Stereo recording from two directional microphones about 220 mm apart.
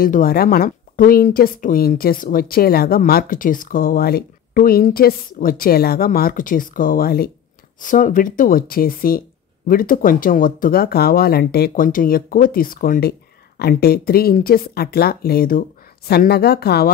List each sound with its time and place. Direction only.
0.0 s speech: 40° left (ahead or behind)